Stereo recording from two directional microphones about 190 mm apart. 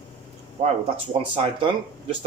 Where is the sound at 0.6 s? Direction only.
35° right (ahead or behind).